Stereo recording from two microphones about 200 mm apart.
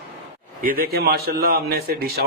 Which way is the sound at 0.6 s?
45° right (ahead or behind).